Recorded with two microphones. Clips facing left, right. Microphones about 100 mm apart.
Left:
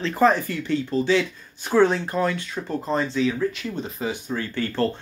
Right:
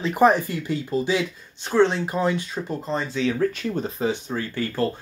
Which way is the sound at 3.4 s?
40° right (ahead or behind).